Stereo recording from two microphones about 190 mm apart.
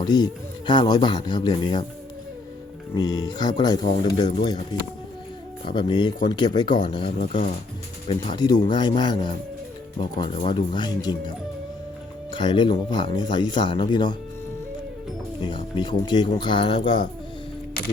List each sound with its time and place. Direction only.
0.0 s speech: 20° left (ahead or behind)
2.9 s speech: 20° left (ahead or behind)
5.6 s speech: 25° left (ahead or behind)
15.4 s speech: 25° left (ahead or behind)